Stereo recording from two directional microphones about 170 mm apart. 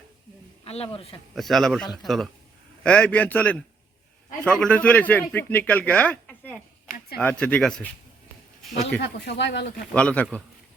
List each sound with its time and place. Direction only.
0.6 s speech: 35° left (ahead or behind)
1.4 s a man's voice: centre (ahead or behind)
4.6 s speech: 10° left (ahead or behind)
9.0 s speech: 75° left (ahead or behind)
9.9 s speech: 10° left (ahead or behind)